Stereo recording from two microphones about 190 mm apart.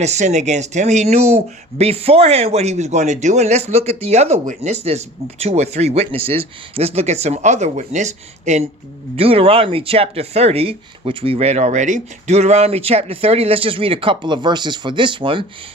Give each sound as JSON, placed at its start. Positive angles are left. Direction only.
{"t": 0.0, "sound": "speech", "side_deg": -35}